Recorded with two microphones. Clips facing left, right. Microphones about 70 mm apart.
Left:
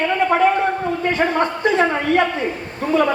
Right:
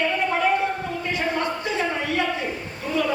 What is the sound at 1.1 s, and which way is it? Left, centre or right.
A man's voice, left.